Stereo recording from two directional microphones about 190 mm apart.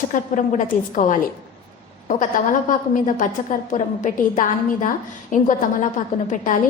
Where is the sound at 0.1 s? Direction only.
40° left (ahead or behind).